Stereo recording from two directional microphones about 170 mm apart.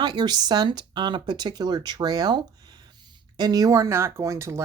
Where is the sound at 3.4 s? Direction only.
20° right (ahead or behind).